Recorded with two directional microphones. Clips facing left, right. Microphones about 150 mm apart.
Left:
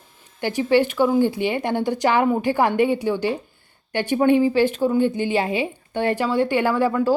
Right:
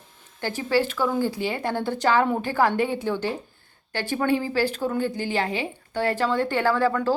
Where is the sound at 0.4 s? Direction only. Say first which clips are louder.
Left 5 dB; 15° left (ahead or behind).